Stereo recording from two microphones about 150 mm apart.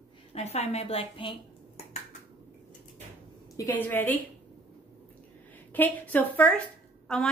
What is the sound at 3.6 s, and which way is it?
Speech, 15° left (ahead or behind).